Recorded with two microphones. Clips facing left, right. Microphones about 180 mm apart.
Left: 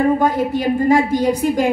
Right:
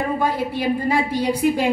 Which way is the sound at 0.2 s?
45° left (ahead or behind).